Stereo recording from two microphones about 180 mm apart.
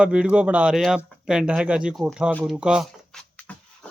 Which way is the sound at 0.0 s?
5° right (ahead or behind).